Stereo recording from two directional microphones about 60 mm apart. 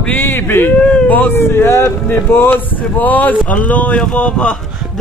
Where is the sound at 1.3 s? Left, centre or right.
Left; by 4.6 s centre.